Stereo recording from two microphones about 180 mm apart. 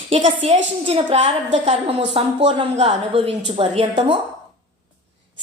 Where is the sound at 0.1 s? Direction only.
35° right (ahead or behind).